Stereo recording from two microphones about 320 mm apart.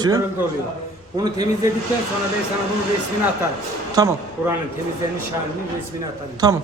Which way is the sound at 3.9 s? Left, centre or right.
Centre.